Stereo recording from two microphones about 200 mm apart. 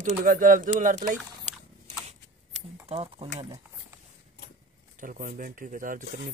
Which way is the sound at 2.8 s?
30° right (ahead or behind).